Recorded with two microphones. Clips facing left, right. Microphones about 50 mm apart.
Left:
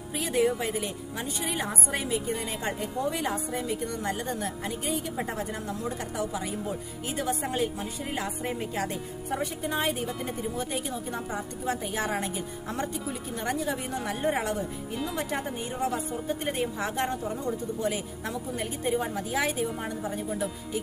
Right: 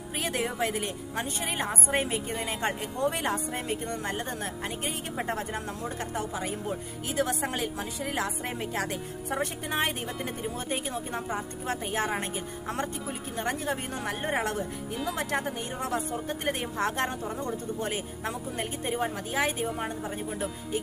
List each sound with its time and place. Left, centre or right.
0.2 s speech: right
1.5 s a woman's voice: right
2.6 s speech: right
7.2 s music: right
11.6 s a woman's voice: right
13.4 s a woman's voice: right
15.3 s music: right
16.5 s speech: right
18.9 s a woman's voice: right